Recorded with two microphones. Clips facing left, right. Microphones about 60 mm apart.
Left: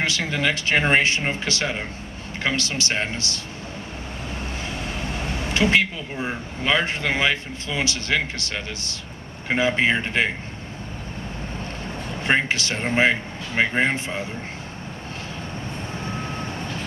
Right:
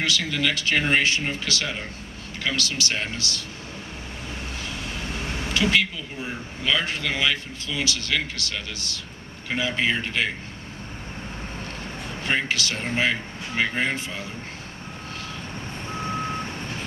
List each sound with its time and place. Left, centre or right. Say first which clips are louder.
0.0 s speech: left 2 dB; left
5.5 s a woman's voice: left 3 dB; left
12.2 s speech: left 4 dB; left